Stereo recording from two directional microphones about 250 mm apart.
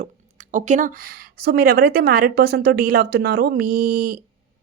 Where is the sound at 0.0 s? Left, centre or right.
Right.